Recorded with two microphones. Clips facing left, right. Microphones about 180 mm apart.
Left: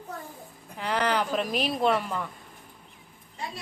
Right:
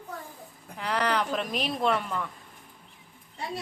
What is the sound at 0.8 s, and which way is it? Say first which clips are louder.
A woman's voice: left 1 dB; centre (ahead or behind).